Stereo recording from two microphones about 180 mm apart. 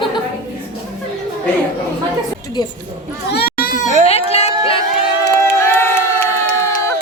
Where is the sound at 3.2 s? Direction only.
60° left (ahead or behind).